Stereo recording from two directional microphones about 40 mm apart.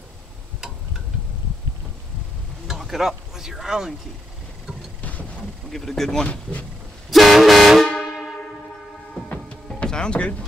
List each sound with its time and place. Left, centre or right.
2.8 s speech: centre
5.7 s speech: centre
7.1 s vehicle horn: centre
8.0 s a sound: centre
9.8 s speech: left